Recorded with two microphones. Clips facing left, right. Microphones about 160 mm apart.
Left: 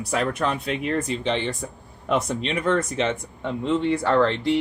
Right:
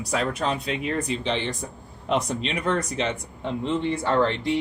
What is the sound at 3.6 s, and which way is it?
Speech, 65° left (ahead or behind).